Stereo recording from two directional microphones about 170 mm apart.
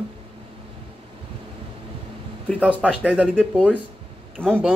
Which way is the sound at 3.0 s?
5° right (ahead or behind).